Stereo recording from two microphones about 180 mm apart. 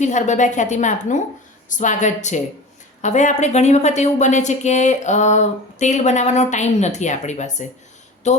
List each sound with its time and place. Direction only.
0.0 s a woman's voice: 40° left (ahead or behind)